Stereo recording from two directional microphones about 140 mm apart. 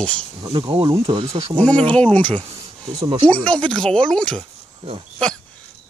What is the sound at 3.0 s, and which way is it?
Speech, 40° right (ahead or behind).